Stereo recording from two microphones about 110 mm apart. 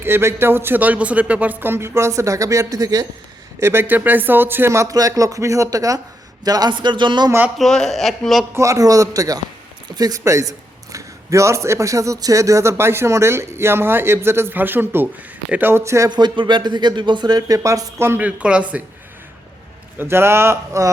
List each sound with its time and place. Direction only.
0.0 s a man's voice: 20° right (ahead or behind)
3.6 s a man's voice: 20° right (ahead or behind); by 7.3 s 45° right (ahead or behind)
7.3 s speech: 20° right (ahead or behind)
7.6 s a man's voice: 5° left (ahead or behind)
8.5 s a man's voice: 30° right (ahead or behind)
16.0 s speech: 40° right (ahead or behind); by 18.8 s 10° right (ahead or behind)
20.0 s a man's voice: 20° right (ahead or behind)